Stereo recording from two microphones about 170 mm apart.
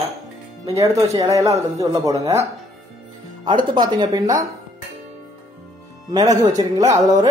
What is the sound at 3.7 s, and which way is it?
Speech, 25° right (ahead or behind).